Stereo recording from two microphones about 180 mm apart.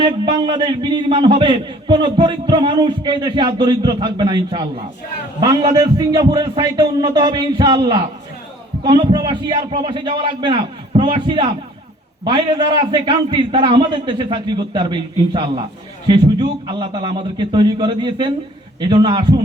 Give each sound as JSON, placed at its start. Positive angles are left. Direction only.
{"t": 0.0, "sound": "a man's voice", "side_deg": -25}